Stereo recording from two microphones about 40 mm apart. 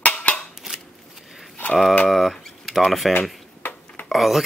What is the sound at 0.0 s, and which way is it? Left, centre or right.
Scissors, left.